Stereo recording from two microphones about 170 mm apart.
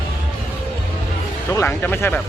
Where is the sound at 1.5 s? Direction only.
10° left (ahead or behind).